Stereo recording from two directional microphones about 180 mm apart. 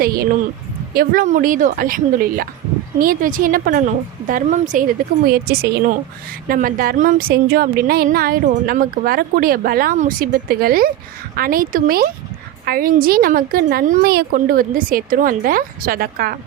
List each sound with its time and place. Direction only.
0.0 s a woman's voice: 55° right (ahead or behind)
5.3 s a woman's voice: 60° right (ahead or behind)